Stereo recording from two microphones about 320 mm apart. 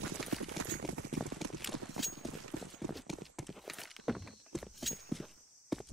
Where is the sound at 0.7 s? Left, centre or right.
Right.